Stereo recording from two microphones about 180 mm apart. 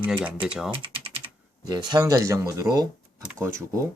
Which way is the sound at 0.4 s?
5° right (ahead or behind).